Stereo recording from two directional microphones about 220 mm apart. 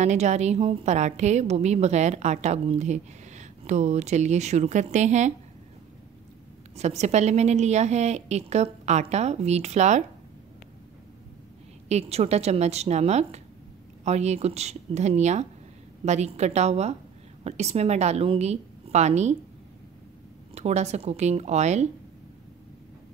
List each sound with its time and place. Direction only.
0.0 s a woman's voice: 30° right (ahead or behind)
6.8 s a woman's voice: 30° right (ahead or behind)
11.9 s a woman's voice: 30° right (ahead or behind)
20.5 s a woman's voice: 30° right (ahead or behind)